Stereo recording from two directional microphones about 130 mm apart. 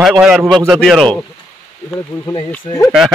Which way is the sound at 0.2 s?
5° right (ahead or behind).